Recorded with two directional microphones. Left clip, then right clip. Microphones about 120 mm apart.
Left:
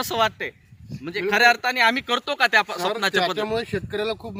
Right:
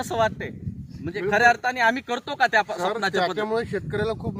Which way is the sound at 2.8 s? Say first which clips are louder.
Left 1 dB; 10° left (ahead or behind).